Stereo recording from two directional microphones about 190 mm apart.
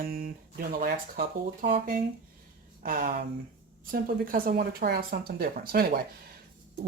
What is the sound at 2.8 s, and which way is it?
Speech, 45° right (ahead or behind).